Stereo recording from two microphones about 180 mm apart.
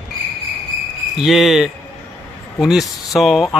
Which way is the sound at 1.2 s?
Centre (ahead or behind).